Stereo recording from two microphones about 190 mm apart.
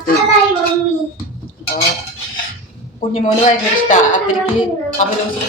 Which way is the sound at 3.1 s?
40° left (ahead or behind).